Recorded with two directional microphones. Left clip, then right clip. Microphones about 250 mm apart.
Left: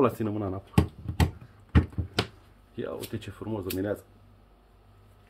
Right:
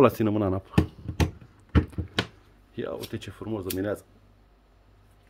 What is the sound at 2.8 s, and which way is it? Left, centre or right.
Speech, right.